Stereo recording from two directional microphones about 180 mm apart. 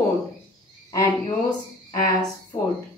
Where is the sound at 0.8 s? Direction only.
20° left (ahead or behind).